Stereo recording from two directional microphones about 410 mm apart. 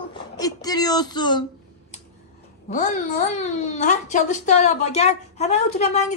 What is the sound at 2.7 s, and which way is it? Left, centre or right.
A child's voice, centre.